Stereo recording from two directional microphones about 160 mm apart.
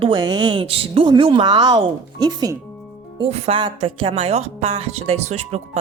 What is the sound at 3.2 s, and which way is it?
A woman's voice, 35° right (ahead or behind).